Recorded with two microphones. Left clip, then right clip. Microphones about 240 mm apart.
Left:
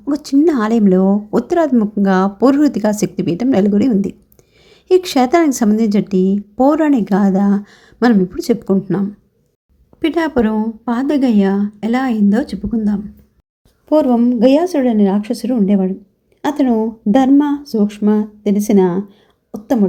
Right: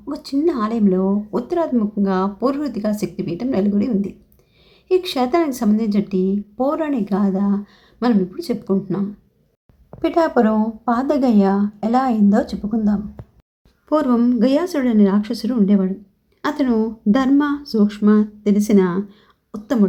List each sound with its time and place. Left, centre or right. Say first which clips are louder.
0.0 s a woman's voice: left 7 dB; centre